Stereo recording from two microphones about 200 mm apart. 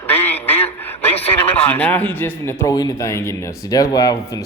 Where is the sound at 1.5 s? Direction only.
10° left (ahead or behind).